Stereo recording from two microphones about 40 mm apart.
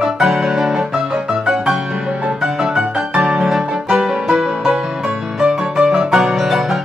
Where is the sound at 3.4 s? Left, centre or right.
Centre.